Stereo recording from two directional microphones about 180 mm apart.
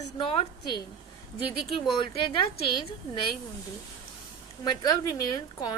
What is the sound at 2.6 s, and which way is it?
Speech, 25° left (ahead or behind).